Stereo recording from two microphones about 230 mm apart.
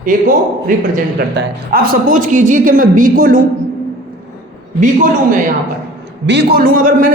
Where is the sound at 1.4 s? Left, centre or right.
Right.